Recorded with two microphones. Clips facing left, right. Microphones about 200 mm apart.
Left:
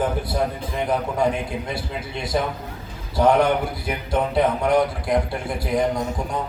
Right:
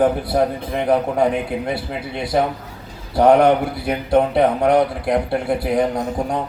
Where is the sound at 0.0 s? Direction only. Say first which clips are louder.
Right 6 dB; 60° right (ahead or behind).